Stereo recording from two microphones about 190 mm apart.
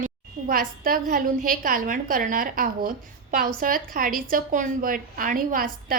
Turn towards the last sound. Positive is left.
turn(degrees=-50)  # may be behind; listen again after turning